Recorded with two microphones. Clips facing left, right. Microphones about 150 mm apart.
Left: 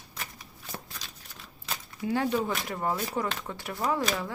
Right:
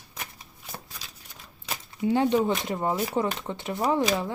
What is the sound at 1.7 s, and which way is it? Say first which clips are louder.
Speech: right 5 dB; 20° right (ahead or behind).